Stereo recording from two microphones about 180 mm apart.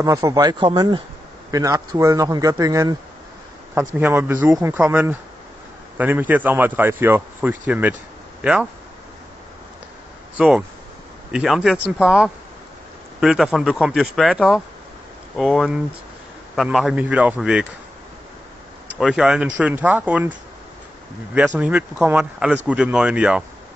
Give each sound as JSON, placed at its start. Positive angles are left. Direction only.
{"t": 0.0, "sound": "a man's voice", "side_deg": -20}
{"t": 10.3, "sound": "a man's voice", "side_deg": -5}
{"t": 18.9, "sound": "a man's voice", "side_deg": -5}
{"t": 21.5, "sound": "speech", "side_deg": -5}